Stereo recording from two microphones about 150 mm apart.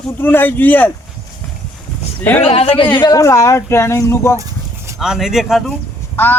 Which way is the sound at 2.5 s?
40° left (ahead or behind).